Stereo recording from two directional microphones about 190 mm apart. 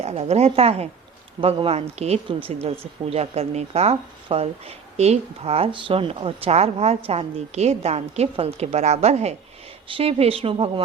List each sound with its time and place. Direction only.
0.0 s speech: 35° right (ahead or behind)